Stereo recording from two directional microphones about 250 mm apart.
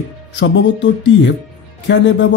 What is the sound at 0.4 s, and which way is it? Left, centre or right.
Speech, left.